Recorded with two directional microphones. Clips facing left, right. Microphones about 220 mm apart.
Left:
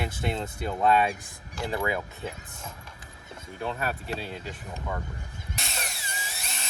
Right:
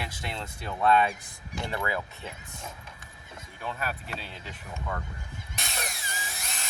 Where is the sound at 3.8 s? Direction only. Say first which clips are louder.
Left 4 dB; 30° left (ahead or behind).